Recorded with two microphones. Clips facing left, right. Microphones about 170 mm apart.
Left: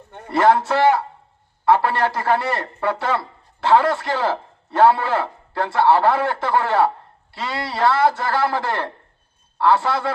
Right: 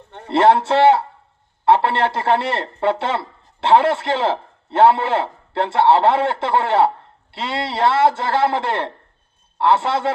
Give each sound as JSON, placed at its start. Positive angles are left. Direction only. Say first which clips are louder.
{"t": 0.3, "sound": "speech", "louder": "right 2 dB", "side_deg": -25}